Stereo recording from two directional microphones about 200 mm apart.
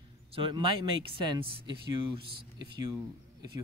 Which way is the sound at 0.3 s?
25° right (ahead or behind).